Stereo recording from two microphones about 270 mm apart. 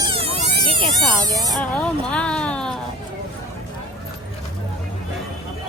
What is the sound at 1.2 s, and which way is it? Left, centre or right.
Speech, centre.